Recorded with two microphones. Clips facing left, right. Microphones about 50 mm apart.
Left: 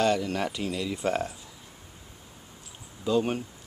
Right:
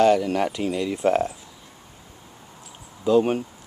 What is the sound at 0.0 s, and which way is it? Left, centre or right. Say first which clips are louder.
Speech: right 7 dB; centre.